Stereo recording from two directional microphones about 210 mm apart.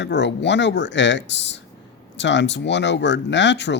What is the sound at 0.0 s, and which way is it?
Speech, 55° left (ahead or behind).